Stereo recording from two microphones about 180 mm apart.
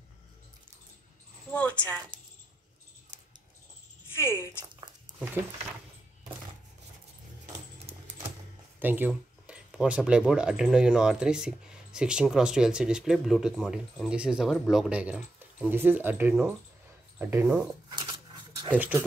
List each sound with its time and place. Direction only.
1.5 s a woman's voice: 10° left (ahead or behind)
4.1 s speech: 15° left (ahead or behind)
7.9 s a sound: 35° right (ahead or behind)
8.7 s speech: 10° right (ahead or behind)
17.9 s dog: 25° right (ahead or behind)
18.7 s speech: 10° right (ahead or behind)